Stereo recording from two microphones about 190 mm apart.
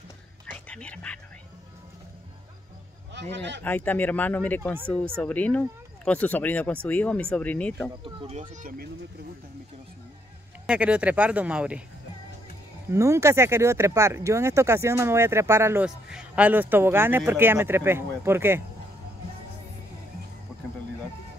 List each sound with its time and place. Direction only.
0.5 s music: 5° left (ahead or behind)
3.1 s a man's voice: 65° right (ahead or behind)
3.6 s speech: 10° left (ahead or behind)
8.0 s speech: 30° right (ahead or behind)
10.7 s speech: 5° right (ahead or behind)
12.9 s speech: 15° right (ahead or behind)